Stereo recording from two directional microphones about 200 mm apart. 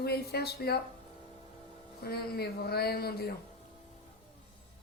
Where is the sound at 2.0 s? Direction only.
50° left (ahead or behind).